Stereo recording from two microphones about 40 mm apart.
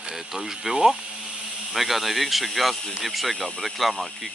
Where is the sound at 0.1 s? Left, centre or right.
Centre.